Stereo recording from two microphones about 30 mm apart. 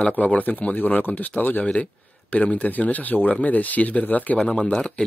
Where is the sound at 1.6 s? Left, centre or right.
Left.